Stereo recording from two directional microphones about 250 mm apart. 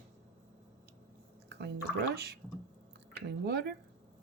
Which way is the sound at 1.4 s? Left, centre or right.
Right.